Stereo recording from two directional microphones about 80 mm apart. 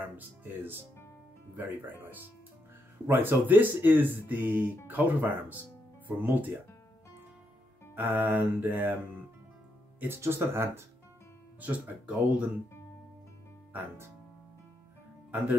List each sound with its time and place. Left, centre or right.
0.4 s speech: right
7.9 s speech: right
9.9 s speech: right
11.6 s speech: centre